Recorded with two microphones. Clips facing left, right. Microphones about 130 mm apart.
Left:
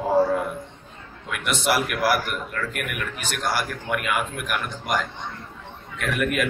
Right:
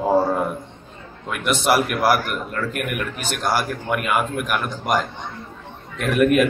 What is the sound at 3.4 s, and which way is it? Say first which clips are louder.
Speech: right 4 dB; 45° right (ahead or behind).